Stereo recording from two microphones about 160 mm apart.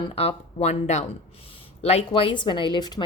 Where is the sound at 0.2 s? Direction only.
40° left (ahead or behind).